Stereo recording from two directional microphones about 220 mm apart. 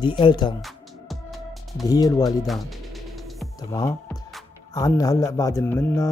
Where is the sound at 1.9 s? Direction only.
15° left (ahead or behind).